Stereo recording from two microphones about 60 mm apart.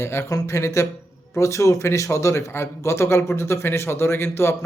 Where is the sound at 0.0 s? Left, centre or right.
Left.